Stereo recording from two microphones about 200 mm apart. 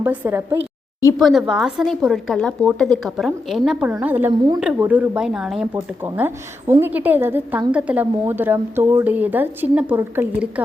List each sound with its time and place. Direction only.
0.0 s a woman's voice: 10° right (ahead or behind)
1.2 s a woman's voice: centre (ahead or behind)